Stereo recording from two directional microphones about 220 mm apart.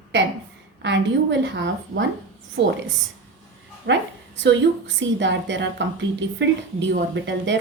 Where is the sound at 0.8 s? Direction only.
55° right (ahead or behind).